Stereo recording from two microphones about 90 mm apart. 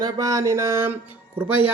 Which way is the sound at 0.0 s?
40° right (ahead or behind).